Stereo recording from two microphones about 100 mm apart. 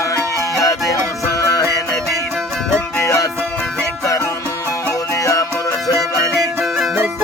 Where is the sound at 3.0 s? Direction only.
35° left (ahead or behind).